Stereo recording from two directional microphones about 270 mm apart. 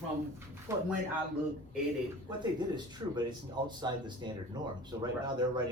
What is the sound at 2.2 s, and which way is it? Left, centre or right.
Speech, centre.